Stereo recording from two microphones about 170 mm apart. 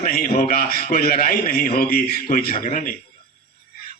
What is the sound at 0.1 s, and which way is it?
A man's voice, 60° left (ahead or behind).